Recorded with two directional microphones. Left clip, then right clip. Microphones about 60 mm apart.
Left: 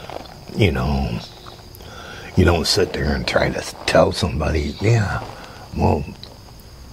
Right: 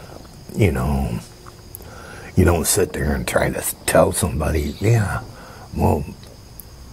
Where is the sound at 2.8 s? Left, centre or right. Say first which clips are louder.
Left 1 dB; centre.